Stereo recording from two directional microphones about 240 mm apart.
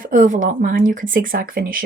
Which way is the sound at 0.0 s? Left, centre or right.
Right.